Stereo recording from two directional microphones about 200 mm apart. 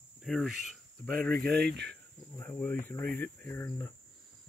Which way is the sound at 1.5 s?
55° right (ahead or behind).